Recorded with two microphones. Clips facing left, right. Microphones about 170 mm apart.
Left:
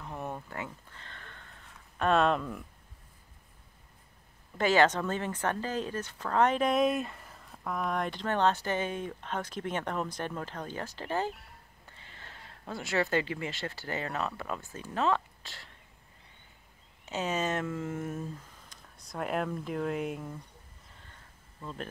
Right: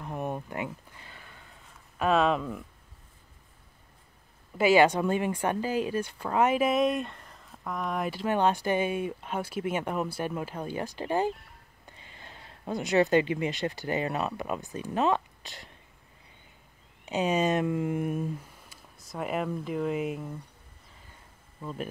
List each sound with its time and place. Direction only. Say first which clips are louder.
0.0 s a sound: right 5 dB; 15° right (ahead or behind); by 2.6 s centre (ahead or behind)
4.6 s speech: right 4 dB; 10° right (ahead or behind)
17.0 s speech: right 6 dB; 15° right (ahead or behind)
21.5 s speech: right 4 dB; 10° right (ahead or behind)